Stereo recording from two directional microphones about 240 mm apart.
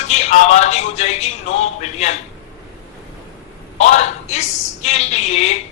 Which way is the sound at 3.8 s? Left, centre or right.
Left.